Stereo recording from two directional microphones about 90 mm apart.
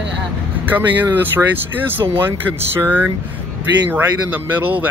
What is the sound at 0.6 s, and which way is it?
Speech, 20° right (ahead or behind).